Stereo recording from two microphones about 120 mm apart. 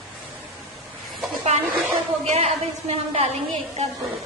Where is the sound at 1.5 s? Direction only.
65° right (ahead or behind).